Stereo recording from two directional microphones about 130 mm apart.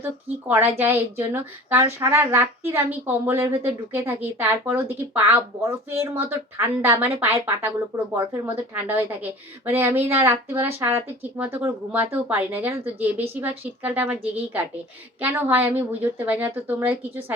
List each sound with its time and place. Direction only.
0.0 s speech: 15° right (ahead or behind)
15.2 s speech: 15° right (ahead or behind)